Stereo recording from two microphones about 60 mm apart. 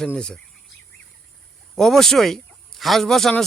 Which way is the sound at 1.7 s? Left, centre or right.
Centre.